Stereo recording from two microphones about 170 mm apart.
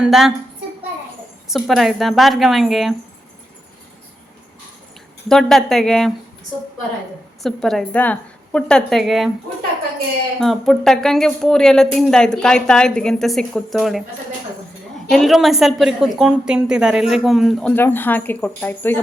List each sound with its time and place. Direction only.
0.0 s a woman's voice: 5° right (ahead or behind)
1.5 s a woman's voice: centre (ahead or behind)
5.3 s a woman's voice: centre (ahead or behind)
7.4 s a woman's voice: centre (ahead or behind)
10.4 s a woman's voice: centre (ahead or behind)
15.1 s a woman's voice: centre (ahead or behind)